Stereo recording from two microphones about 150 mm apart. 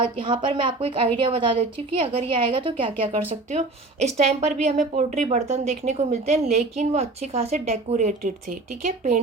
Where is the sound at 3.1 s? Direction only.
50° right (ahead or behind).